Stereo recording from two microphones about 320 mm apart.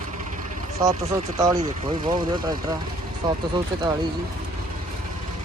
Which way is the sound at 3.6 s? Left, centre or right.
Centre.